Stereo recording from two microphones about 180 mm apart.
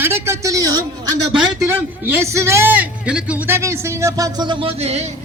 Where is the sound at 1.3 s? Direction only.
5° right (ahead or behind).